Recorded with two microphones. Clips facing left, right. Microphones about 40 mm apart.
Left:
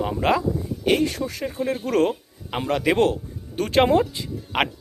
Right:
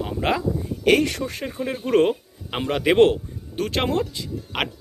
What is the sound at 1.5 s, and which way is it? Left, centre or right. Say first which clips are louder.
Speech: right 1 dB; centre.